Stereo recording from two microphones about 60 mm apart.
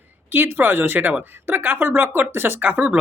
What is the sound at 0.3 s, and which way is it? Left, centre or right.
Speech, right.